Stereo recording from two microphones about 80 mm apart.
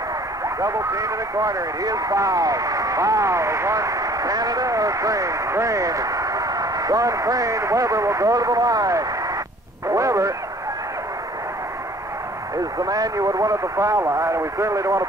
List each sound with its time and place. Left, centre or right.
0.6 s speech: right
9.8 s radio: right
12.8 s speech: right